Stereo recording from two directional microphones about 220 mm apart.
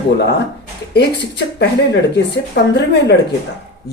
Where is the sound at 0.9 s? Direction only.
50° left (ahead or behind).